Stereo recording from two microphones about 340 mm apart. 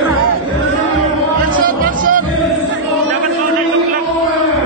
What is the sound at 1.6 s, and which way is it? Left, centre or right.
Music, right.